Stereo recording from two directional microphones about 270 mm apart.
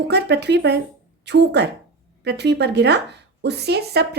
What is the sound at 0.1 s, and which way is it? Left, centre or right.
Speech, right.